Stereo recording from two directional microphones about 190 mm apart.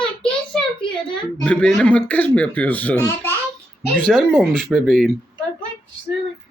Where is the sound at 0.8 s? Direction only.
25° left (ahead or behind).